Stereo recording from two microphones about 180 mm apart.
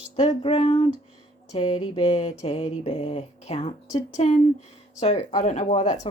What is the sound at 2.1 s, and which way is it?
Speech, 40° left (ahead or behind).